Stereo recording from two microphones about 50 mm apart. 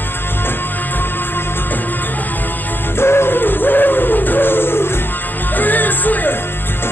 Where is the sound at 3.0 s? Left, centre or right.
Left.